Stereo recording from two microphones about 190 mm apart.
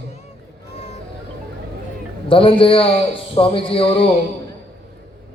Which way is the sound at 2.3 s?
30° left (ahead or behind).